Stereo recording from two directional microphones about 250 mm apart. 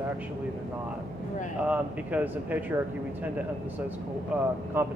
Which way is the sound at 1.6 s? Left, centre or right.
Centre.